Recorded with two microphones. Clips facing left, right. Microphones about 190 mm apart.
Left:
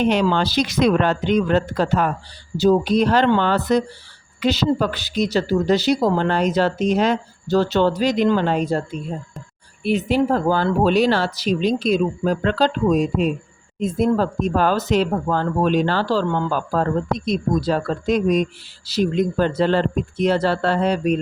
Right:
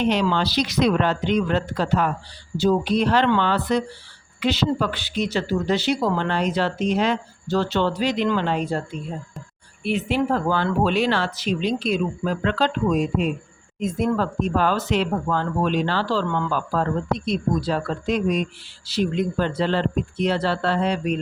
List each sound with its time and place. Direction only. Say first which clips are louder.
0.0 s speech: left 3 dB; 50° left (ahead or behind)
9.8 s speech: left 4 dB; 40° left (ahead or behind)